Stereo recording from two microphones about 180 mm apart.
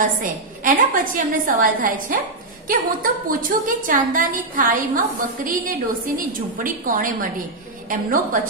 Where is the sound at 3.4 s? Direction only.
50° right (ahead or behind).